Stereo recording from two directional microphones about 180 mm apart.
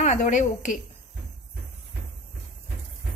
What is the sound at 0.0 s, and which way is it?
Speech, 40° left (ahead or behind).